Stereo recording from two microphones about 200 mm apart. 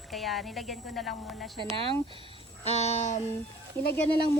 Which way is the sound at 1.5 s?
25° right (ahead or behind).